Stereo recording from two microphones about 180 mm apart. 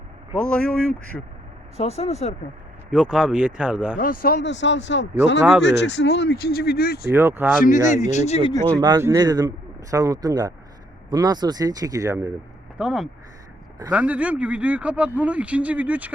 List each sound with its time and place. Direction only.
0.3 s speech: 5° left (ahead or behind)
1.7 s speech: 35° left (ahead or behind)
2.9 s speech: 5° right (ahead or behind)
3.9 s speech: 50° left (ahead or behind)
7.1 s speech: 10° right (ahead or behind)
7.6 s speech: 45° left (ahead or behind)
9.0 s speech: 15° right (ahead or behind)
12.7 s speech: centre (ahead or behind)